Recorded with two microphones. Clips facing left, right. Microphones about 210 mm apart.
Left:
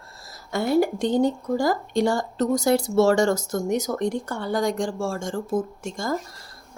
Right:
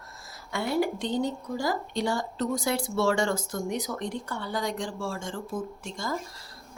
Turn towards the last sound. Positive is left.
turn(degrees=45)  # may be behind; listen again after turning